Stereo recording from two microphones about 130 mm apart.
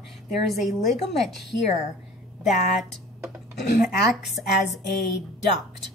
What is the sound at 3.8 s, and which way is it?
Speech, centre (ahead or behind).